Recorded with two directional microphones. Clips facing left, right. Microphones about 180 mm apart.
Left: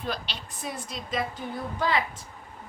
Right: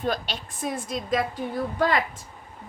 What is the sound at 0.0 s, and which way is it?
A woman's voice, 45° right (ahead or behind).